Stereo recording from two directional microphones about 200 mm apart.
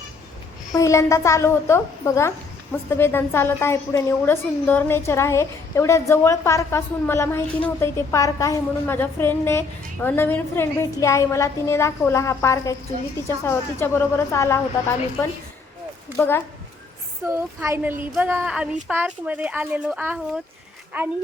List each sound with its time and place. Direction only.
0.7 s a woman's voice: 15° left (ahead or behind)
16.1 s a woman's voice: 10° left (ahead or behind)
17.2 s speech: 15° right (ahead or behind)